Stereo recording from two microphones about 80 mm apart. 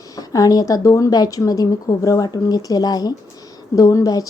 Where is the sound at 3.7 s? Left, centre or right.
Left.